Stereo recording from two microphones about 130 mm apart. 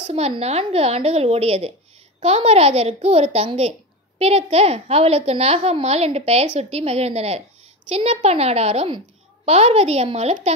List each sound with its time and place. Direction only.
0.4 s a child's voice: 55° right (ahead or behind)